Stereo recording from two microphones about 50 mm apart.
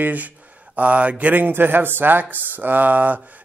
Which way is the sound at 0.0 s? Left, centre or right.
Right.